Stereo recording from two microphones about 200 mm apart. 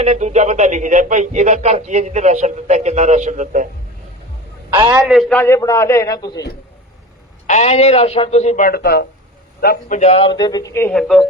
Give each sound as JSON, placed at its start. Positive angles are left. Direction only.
{"t": 0.0, "sound": "speech", "side_deg": -35}
{"t": 4.9, "sound": "a man's voice", "side_deg": -5}
{"t": 5.4, "sound": "speech", "side_deg": 15}
{"t": 7.4, "sound": "a man's voice", "side_deg": 35}
{"t": 10.0, "sound": "speech", "side_deg": 30}